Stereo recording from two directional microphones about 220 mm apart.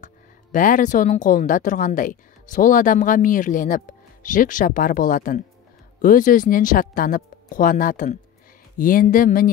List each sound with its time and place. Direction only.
0.0 s speech: 35° left (ahead or behind)